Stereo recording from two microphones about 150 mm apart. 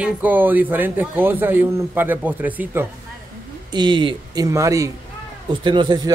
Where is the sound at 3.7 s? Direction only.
30° right (ahead or behind).